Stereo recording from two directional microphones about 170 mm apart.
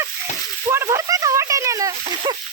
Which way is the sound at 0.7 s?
15° right (ahead or behind).